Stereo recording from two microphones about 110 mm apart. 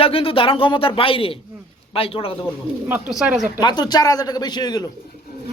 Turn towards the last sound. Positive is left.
turn(degrees=40)  # may be behind; listen again after turning